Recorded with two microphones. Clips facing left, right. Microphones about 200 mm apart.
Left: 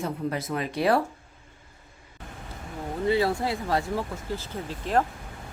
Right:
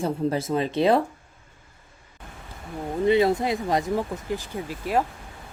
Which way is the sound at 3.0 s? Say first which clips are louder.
Right 4 dB; 20° right (ahead or behind).